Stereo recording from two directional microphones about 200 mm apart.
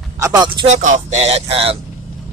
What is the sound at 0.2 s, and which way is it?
Speech, 20° right (ahead or behind).